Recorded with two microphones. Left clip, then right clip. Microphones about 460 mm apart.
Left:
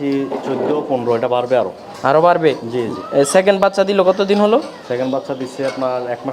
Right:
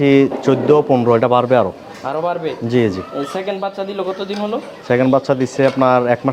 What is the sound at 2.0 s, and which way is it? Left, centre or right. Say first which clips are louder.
Speech: left 8 dB; left.